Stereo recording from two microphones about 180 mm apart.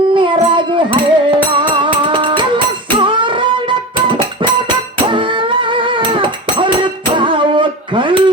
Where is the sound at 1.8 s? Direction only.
25° right (ahead or behind).